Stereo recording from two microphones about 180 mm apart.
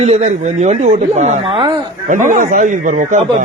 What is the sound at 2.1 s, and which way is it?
Speech, 45° right (ahead or behind).